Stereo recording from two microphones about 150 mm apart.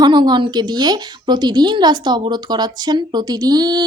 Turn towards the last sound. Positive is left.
turn(degrees=-30)  # may be behind; listen again after turning